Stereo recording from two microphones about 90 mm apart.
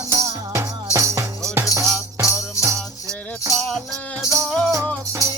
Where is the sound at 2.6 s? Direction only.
35° left (ahead or behind).